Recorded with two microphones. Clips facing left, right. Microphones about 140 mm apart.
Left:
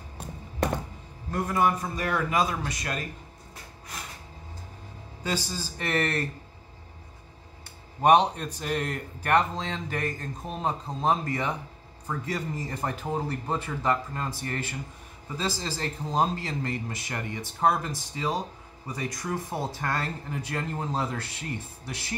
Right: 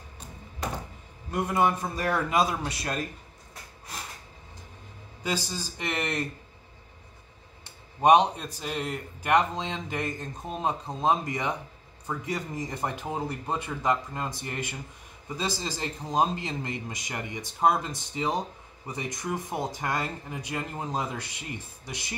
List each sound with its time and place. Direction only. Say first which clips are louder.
1.3 s a man's voice: even; 25° right (ahead or behind)
5.2 s speech: even; 15° right (ahead or behind)
8.0 s speech: even; 15° right (ahead or behind)